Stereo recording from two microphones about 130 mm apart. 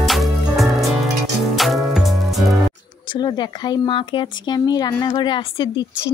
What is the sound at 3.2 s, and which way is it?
Speech, 35° left (ahead or behind).